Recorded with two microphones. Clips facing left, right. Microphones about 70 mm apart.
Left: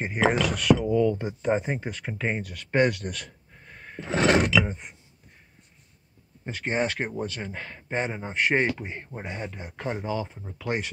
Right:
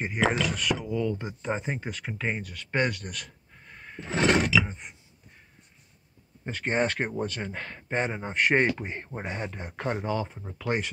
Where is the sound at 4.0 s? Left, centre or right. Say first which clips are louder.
Left 2 dB; left.